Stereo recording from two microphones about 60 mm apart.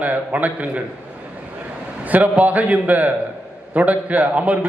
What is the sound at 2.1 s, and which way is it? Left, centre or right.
A man's voice, right.